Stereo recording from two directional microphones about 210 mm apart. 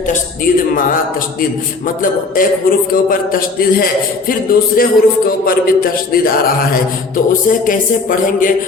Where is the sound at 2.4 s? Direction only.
40° left (ahead or behind).